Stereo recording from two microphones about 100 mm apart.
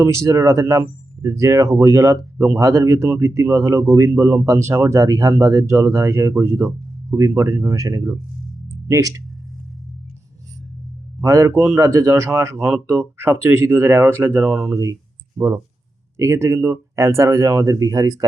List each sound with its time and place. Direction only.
0.0 s speech: 30° right (ahead or behind)
11.2 s speech: 35° right (ahead or behind)
16.1 s speech: 30° right (ahead or behind)